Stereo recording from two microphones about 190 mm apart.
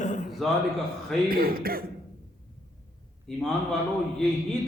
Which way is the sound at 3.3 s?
5° left (ahead or behind).